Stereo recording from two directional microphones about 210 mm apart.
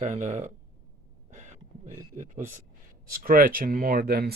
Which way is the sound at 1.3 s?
35° right (ahead or behind).